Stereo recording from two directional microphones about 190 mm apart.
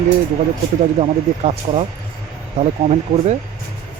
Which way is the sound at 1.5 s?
35° right (ahead or behind).